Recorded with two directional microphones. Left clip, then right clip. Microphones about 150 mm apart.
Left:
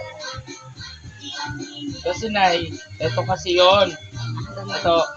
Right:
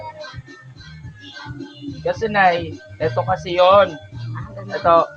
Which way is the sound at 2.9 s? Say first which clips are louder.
Right 3 dB; 25° right (ahead or behind).